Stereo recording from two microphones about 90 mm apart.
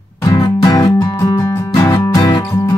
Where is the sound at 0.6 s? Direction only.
40° left (ahead or behind).